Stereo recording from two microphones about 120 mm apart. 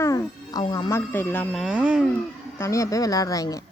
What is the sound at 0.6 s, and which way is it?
Speech, 40° left (ahead or behind).